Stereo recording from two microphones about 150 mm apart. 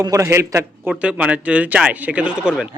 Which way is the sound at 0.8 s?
5° right (ahead or behind).